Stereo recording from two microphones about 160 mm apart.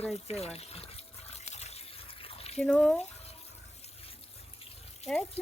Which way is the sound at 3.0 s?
40° left (ahead or behind).